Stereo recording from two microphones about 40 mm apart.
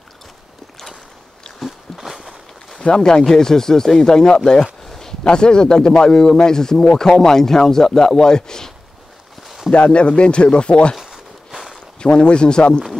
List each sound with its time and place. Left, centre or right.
2.0 s walk: centre
2.8 s a man's voice: left
4.8 s a sound: centre
5.3 s a man's voice: left
9.8 s speech: left
11.0 s walk: centre
12.0 s speech: left